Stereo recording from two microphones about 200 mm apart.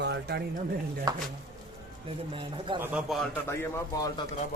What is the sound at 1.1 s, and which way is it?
Speech, 20° right (ahead or behind).